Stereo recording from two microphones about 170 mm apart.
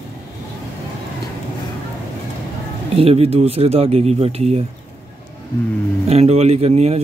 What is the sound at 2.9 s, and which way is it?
Speech, 35° right (ahead or behind).